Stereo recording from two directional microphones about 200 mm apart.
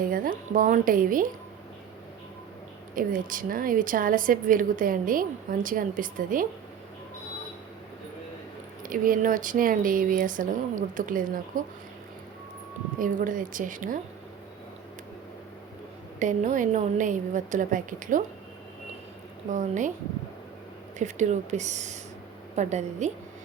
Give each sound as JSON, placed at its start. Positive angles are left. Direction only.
{"t": 0.0, "sound": "a woman's voice", "side_deg": -45}
{"t": 2.9, "sound": "a woman's voice", "side_deg": -45}
{"t": 8.8, "sound": "a woman's voice", "side_deg": -45}
{"t": 13.0, "sound": "a woman's voice", "side_deg": -40}
{"t": 16.1, "sound": "a woman's voice", "side_deg": -40}
{"t": 19.5, "sound": "a woman's voice", "side_deg": -40}
{"t": 21.0, "sound": "a woman's voice", "side_deg": -35}